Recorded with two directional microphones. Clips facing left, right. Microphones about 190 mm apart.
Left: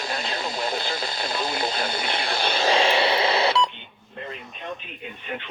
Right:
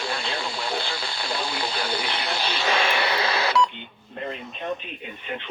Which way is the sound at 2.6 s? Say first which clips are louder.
Left 4 dB; 30° left (ahead or behind).